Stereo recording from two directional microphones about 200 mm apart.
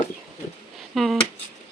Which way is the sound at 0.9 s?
Centre (ahead or behind).